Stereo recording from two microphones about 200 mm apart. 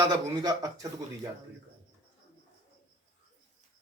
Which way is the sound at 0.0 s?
20° right (ahead or behind).